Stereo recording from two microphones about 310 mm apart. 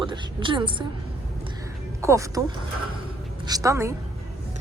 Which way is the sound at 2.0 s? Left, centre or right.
Centre.